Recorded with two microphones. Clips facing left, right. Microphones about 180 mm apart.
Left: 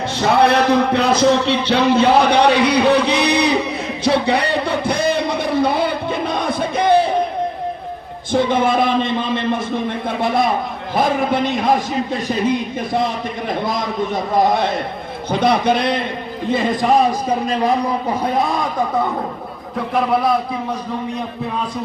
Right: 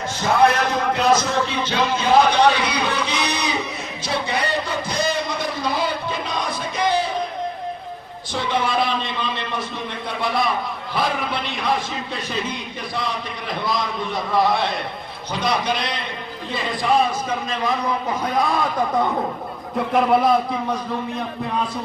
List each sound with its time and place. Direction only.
0.2 s a man's voice: 65° left (ahead or behind)
4.0 s a sound: 65° left (ahead or behind)
8.3 s a man's voice: 50° left (ahead or behind)
13.5 s a man's voice: 45° left (ahead or behind)
15.3 s a man's voice: 55° left (ahead or behind); by 18.4 s 30° left (ahead or behind)
19.9 s a man's voice: centre (ahead or behind)